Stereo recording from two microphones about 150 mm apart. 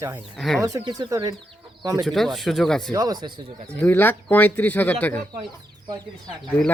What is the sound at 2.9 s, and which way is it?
Speech, 25° right (ahead or behind).